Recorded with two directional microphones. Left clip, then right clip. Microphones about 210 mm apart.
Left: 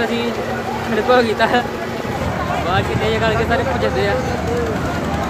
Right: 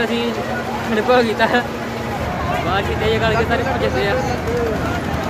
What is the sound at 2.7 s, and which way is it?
Speech, 10° left (ahead or behind).